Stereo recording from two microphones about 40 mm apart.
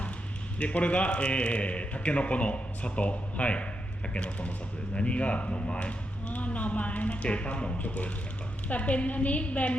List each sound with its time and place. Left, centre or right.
0.6 s a man's voice: left